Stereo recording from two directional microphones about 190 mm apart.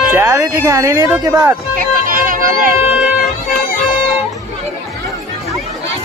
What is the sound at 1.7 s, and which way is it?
Music, 45° right (ahead or behind).